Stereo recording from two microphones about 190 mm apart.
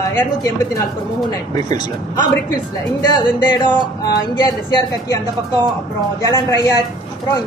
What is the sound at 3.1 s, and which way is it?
A woman's voice, 25° left (ahead or behind).